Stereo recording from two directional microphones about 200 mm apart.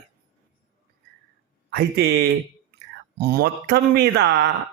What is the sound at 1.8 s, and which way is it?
Speech, 55° right (ahead or behind).